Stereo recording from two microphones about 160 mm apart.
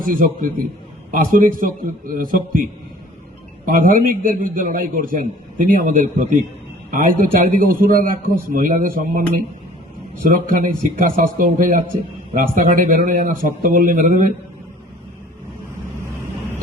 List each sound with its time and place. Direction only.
0.0 s a man's voice: 60° right (ahead or behind)
3.7 s a man's voice: 60° right (ahead or behind)
10.4 s a man's voice: 55° right (ahead or behind)